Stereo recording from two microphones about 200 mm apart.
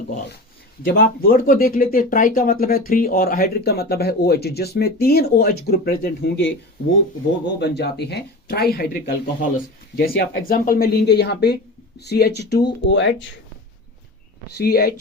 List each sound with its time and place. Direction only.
0.9 s speech: 45° left (ahead or behind)
7.6 s speech: 55° left (ahead or behind)
14.6 s speech: 50° left (ahead or behind)